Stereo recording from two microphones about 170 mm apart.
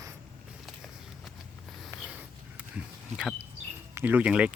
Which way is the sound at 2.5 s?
5° right (ahead or behind).